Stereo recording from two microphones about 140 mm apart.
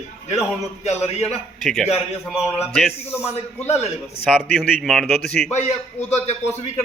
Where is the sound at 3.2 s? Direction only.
50° left (ahead or behind).